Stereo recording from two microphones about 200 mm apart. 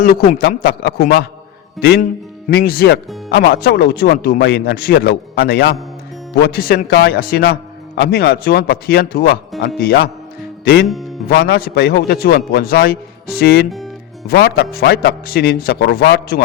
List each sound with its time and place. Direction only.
0.0 s a man's voice: 50° left (ahead or behind)
11.3 s a man's voice: 55° left (ahead or behind)
13.7 s speech: centre (ahead or behind)
14.3 s a man's voice: 50° left (ahead or behind)